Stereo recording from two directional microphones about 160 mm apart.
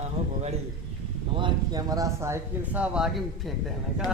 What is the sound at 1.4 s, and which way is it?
Speech, 25° right (ahead or behind).